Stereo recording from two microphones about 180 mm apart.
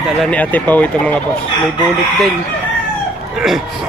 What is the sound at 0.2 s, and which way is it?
Speech, 10° left (ahead or behind).